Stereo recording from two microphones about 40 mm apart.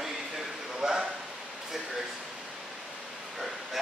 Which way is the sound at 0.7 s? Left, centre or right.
Centre.